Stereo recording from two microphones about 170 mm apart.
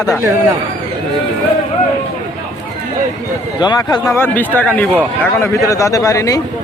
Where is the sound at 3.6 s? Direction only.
25° left (ahead or behind).